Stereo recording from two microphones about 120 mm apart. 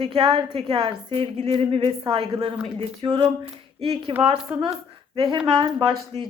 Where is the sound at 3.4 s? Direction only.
50° right (ahead or behind).